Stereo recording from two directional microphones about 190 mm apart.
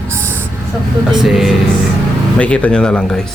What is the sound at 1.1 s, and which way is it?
Speech, centre (ahead or behind).